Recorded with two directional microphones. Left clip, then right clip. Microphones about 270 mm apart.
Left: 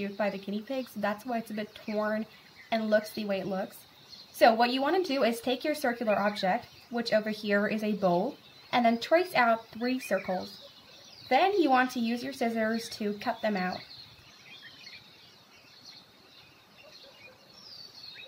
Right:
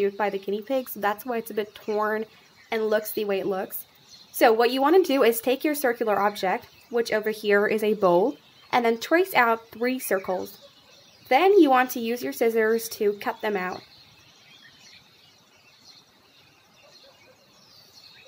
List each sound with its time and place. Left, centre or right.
0.0 s speech: right
11.2 s speech: right